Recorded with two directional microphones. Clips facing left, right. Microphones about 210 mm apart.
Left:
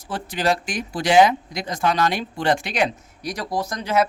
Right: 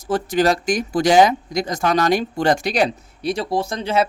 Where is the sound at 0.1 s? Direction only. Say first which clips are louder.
Right 5 dB; 45° right (ahead or behind).